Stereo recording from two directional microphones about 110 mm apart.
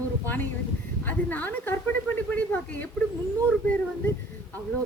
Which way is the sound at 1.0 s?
15° left (ahead or behind).